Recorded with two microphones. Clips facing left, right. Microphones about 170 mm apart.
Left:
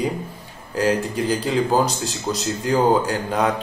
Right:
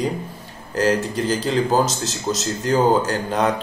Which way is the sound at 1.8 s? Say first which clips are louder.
Right 1 dB; 40° right (ahead or behind).